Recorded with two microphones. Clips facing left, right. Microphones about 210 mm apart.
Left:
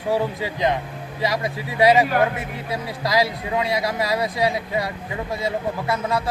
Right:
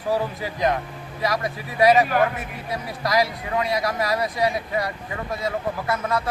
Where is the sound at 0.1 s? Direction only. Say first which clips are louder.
Left 2 dB; 25° left (ahead or behind).